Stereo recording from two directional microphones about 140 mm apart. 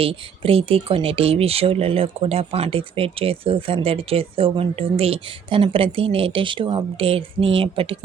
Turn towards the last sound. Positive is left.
turn(degrees=-40)  # may be behind; listen again after turning